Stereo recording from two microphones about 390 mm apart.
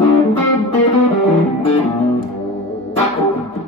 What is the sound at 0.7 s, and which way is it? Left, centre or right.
Music, centre.